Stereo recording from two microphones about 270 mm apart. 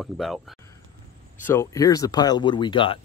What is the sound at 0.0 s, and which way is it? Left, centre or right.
Speech, centre.